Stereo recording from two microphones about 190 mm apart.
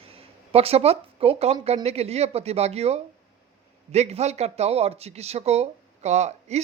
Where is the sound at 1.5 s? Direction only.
35° right (ahead or behind).